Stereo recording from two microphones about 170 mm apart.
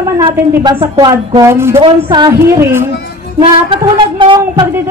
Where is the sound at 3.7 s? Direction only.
30° right (ahead or behind).